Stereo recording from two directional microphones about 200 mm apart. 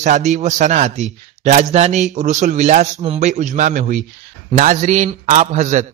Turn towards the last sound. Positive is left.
turn(degrees=-35)  # may be behind; listen again after turning